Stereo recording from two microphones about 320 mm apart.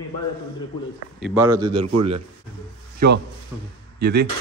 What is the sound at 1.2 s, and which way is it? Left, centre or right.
Speech, centre.